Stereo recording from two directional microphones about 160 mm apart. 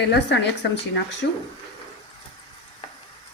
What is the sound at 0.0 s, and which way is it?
A woman's voice, 90° left.